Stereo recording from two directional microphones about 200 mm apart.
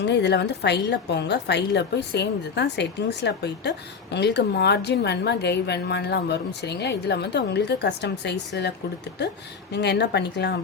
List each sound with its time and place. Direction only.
0.1 s a woman's voice: 60° left (ahead or behind)